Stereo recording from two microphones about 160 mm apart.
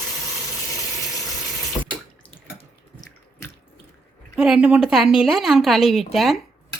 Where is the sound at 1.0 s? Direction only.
20° left (ahead or behind).